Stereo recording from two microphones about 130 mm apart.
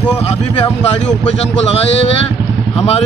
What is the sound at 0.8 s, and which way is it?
Speech, 55° left (ahead or behind).